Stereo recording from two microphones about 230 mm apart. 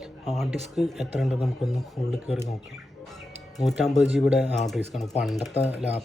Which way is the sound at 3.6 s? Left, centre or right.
Centre.